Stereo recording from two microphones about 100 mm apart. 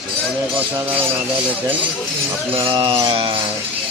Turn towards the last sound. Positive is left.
turn(degrees=-60)  # may be behind; listen again after turning